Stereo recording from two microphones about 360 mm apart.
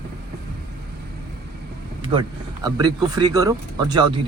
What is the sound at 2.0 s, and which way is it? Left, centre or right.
Speech, centre.